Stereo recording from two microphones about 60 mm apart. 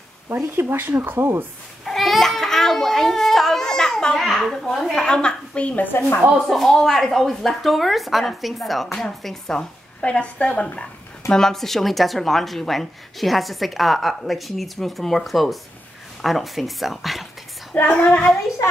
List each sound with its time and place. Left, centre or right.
0.6 s speech: right
1.9 s crying: centre
5.0 s a woman's voice: centre
5.9 s a woman's voice: left
6.4 s a woman's voice: centre
10.0 s speech: centre
17.9 s a woman's voice: centre